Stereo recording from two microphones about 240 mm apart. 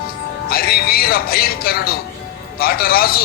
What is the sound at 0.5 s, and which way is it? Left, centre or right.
Speech, left.